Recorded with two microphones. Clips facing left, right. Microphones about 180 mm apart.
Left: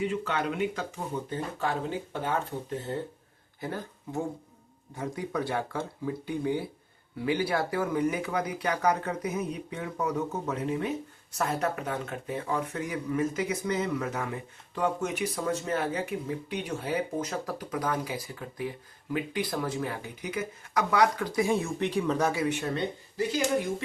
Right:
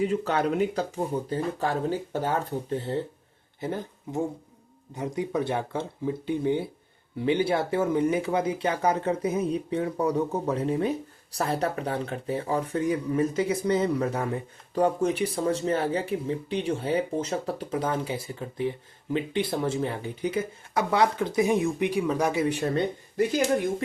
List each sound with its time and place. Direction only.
0.0 s speech: 40° right (ahead or behind)
3.6 s speech: 20° right (ahead or behind)
22.4 s speech: 35° right (ahead or behind)